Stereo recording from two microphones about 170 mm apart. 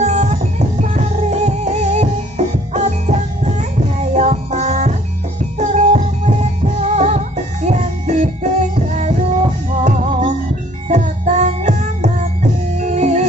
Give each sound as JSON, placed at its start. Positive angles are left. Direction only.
{"t": 0.0, "sound": "music", "side_deg": -40}